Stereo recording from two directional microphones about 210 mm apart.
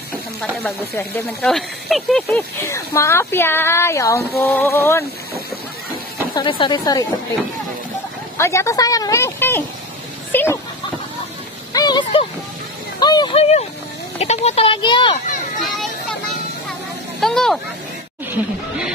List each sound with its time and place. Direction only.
0.4 s speech: 10° left (ahead or behind)
2.2 s speech: 15° left (ahead or behind)
6.3 s speech: 20° left (ahead or behind)
8.4 s a woman's voice: 15° left (ahead or behind)
10.3 s a sound: 10° left (ahead or behind)
11.7 s speech: 20° left (ahead or behind)
15.7 s vehicle: centre (ahead or behind)
17.2 s vehicle: centre (ahead or behind)